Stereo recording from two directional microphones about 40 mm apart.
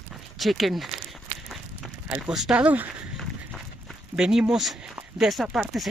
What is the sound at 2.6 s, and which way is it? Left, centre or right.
Speech, right.